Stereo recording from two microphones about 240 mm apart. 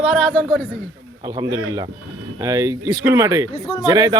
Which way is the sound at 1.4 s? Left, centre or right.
Centre.